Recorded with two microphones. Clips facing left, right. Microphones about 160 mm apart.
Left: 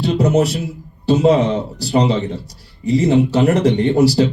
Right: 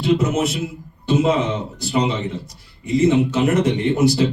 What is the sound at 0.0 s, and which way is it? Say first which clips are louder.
Speech: left 3 dB; 35° left (ahead or behind).